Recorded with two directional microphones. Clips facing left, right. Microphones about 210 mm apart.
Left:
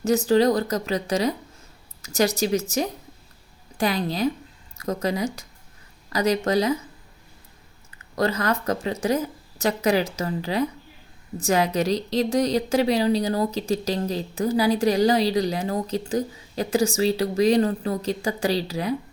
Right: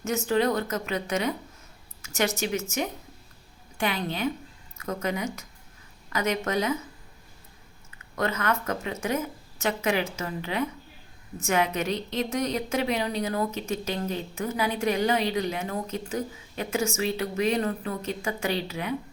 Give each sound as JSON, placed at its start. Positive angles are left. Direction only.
{"t": 0.3, "sound": "a woman's voice", "side_deg": 35}
{"t": 8.1, "sound": "a woman's voice", "side_deg": 35}